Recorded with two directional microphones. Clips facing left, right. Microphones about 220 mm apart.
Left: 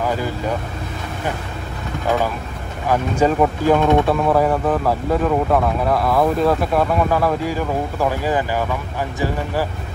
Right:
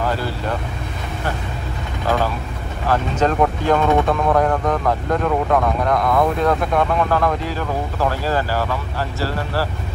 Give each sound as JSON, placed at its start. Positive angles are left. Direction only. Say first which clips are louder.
{"t": 0.0, "sound": "vehicle", "louder": "left 1 dB", "side_deg": 15}
{"t": 2.9, "sound": "speech", "louder": "left 2 dB", "side_deg": 10}